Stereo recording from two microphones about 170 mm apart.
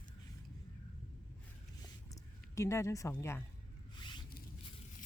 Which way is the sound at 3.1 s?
15° left (ahead or behind).